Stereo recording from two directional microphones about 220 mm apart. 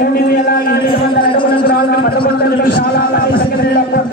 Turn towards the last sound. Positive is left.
turn(degrees=40)  # may be behind; listen again after turning